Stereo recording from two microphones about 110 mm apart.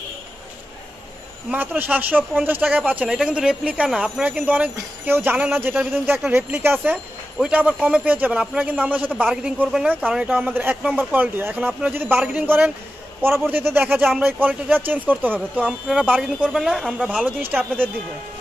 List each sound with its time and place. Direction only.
1.5 s speech: 15° right (ahead or behind)
17.4 s speech: 15° right (ahead or behind)